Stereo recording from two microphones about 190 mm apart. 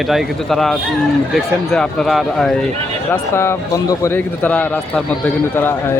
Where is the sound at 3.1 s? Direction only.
15° left (ahead or behind).